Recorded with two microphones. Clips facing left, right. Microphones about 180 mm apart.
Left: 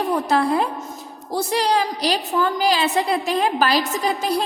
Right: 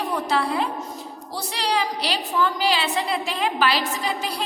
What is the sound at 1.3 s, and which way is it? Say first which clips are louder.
A woman's voice: left 6 dB; 45° left (ahead or behind).